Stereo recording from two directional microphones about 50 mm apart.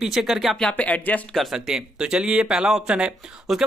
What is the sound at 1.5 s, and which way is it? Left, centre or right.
Speech, centre.